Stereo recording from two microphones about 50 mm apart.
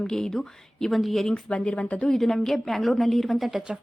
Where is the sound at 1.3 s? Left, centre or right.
Centre.